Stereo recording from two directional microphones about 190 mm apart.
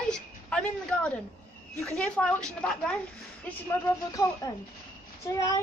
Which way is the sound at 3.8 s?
20° left (ahead or behind).